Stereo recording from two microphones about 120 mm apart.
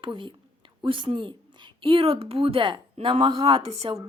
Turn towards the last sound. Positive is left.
turn(degrees=-55)  # may be behind; listen again after turning